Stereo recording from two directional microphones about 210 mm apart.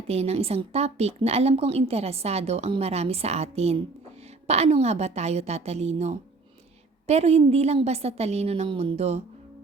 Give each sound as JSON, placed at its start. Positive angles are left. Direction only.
{"t": 0.1, "sound": "a woman's voice", "side_deg": -30}